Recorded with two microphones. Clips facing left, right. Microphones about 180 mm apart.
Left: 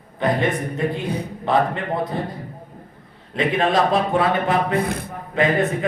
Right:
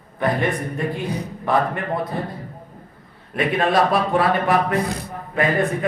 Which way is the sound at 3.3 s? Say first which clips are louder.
Even; 20° left (ahead or behind).